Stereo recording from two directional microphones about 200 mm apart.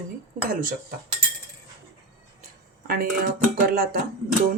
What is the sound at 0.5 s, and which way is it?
Speech, 45° right (ahead or behind).